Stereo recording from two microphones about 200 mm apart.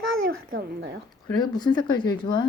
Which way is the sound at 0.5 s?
60° right (ahead or behind).